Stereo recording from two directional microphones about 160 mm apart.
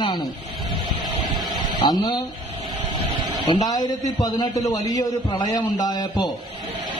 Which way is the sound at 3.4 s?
25° left (ahead or behind).